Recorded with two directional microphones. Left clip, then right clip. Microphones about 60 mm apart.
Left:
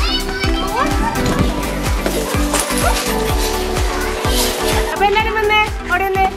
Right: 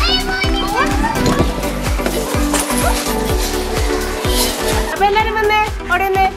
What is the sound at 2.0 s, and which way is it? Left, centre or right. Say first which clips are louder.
Music: right 1 dB; right.